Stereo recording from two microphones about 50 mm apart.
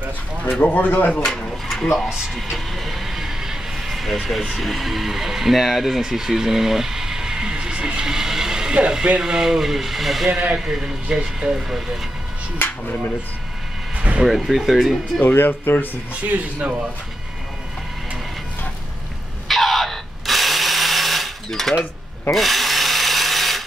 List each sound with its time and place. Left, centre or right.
0.5 s speech: left
1.2 s speech: centre
11.1 s speech: centre
13.9 s a sound: right
14.2 s speech: centre
15.3 s speech: left
16.3 s speech: right
19.4 s a sound: centre
22.3 s rub: centre